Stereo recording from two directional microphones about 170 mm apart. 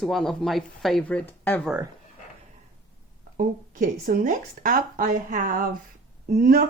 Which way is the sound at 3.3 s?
55° right (ahead or behind).